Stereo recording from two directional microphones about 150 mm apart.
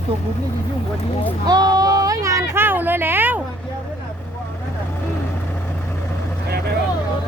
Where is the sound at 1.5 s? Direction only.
25° right (ahead or behind).